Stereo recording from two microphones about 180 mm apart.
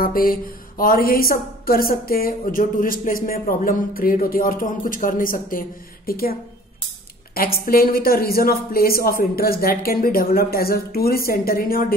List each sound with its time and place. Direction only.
0.0 s a woman's voice: 50° left (ahead or behind)
7.3 s a woman's voice: 55° left (ahead or behind)